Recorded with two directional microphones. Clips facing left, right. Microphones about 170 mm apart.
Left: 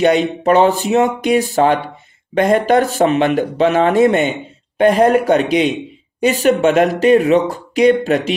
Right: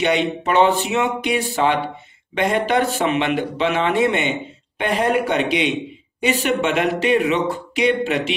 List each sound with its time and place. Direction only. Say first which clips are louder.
0.0 s speech: left 6 dB; 40° left (ahead or behind)